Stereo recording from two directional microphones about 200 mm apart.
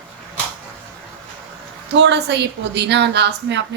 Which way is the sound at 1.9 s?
60° right (ahead or behind).